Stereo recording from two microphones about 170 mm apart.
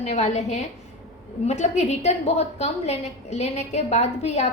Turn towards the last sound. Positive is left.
turn(degrees=40)  # may be behind; listen again after turning